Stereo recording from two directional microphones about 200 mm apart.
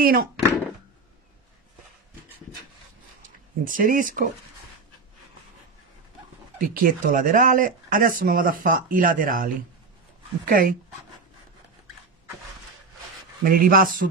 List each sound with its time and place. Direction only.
0.0 s speech: 45° right (ahead or behind)
3.2 s speech: 40° right (ahead or behind)
6.6 s speech: 45° right (ahead or behind)
10.5 s speech: 45° right (ahead or behind)
13.4 s speech: 45° right (ahead or behind)